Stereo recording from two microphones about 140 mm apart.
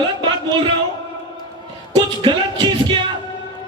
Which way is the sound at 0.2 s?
35° right (ahead or behind).